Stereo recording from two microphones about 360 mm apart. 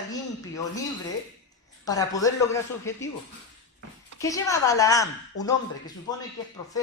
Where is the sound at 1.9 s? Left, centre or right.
Centre.